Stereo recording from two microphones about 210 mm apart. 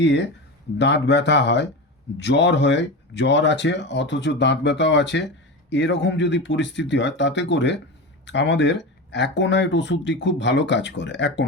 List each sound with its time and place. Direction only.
0.0 s speech: 55° left (ahead or behind)